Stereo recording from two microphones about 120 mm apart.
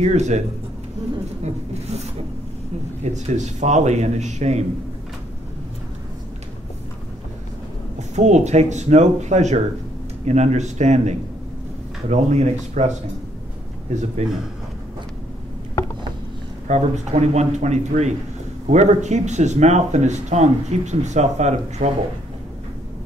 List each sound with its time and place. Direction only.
0.0 s speech: 70° right (ahead or behind)
1.4 s speech: 65° right (ahead or behind)
3.0 s speech: 75° right (ahead or behind)
8.2 s speech: 75° right (ahead or behind)
14.2 s speech: 65° right (ahead or behind)
16.6 s speech: 75° right (ahead or behind)